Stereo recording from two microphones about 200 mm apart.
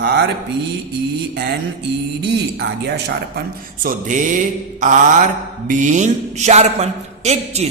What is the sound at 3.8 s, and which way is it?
Speech, 40° right (ahead or behind).